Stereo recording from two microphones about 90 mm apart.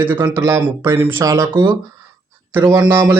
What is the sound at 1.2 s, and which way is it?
Speech, 40° right (ahead or behind).